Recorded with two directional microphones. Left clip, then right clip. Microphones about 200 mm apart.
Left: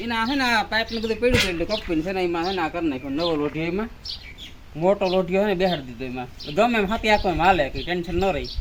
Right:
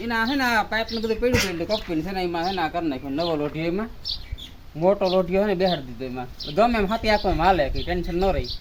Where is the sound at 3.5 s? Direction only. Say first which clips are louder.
Even; 15° right (ahead or behind).